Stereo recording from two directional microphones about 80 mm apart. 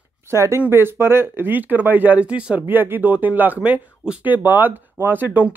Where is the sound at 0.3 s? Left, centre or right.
Right; by 2.6 s centre.